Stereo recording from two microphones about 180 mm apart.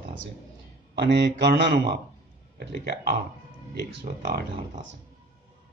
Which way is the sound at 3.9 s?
75° right (ahead or behind).